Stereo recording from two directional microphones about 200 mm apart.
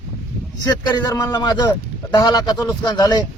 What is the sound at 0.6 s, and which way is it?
A man's voice, 20° left (ahead or behind).